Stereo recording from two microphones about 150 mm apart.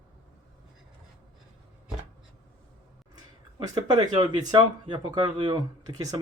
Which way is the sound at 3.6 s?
25° right (ahead or behind).